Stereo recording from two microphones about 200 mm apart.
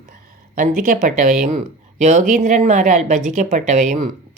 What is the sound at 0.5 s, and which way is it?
Speech, 40° right (ahead or behind).